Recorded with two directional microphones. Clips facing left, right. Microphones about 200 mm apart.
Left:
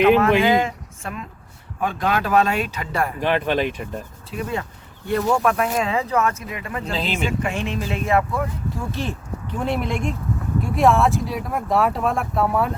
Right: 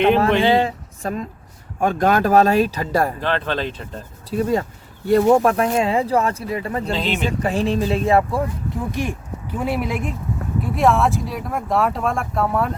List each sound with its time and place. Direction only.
0.2 s speech: 30° right (ahead or behind)
3.2 s speech: 15° left (ahead or behind)
4.3 s speech: 40° right (ahead or behind)
6.9 s speech: centre (ahead or behind)
7.3 s speech: 35° right (ahead or behind)
8.7 s speech: 15° right (ahead or behind); by 12.7 s centre (ahead or behind)